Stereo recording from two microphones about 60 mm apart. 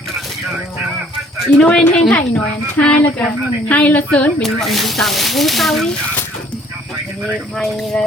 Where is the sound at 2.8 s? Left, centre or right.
Centre.